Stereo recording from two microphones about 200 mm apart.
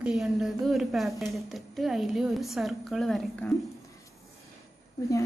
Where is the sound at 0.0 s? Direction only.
Centre (ahead or behind).